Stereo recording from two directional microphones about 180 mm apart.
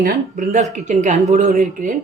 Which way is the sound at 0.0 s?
55° right (ahead or behind).